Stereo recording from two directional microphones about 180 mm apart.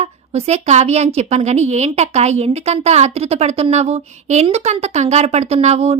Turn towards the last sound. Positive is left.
turn(degrees=-35)  # may be behind; listen again after turning